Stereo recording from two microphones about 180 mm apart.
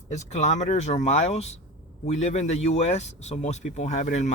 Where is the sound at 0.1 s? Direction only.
40° left (ahead or behind).